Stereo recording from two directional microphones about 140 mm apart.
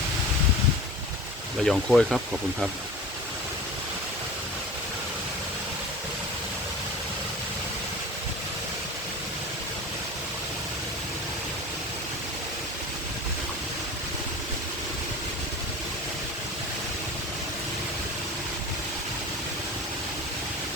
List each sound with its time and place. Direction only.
1.6 s speech: centre (ahead or behind)